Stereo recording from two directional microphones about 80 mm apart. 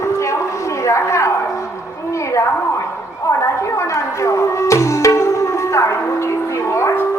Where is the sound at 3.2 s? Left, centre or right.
Left.